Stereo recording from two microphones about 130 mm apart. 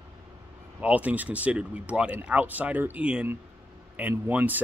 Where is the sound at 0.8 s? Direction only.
10° right (ahead or behind).